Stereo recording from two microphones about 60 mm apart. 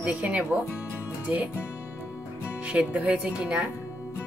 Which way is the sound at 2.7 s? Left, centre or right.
Right.